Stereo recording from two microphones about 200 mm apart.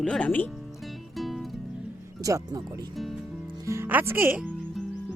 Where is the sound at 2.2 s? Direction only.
20° right (ahead or behind).